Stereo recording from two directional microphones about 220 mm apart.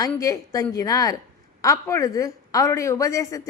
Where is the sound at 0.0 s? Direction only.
15° left (ahead or behind).